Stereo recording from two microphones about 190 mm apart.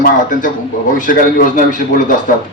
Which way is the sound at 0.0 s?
45° left (ahead or behind).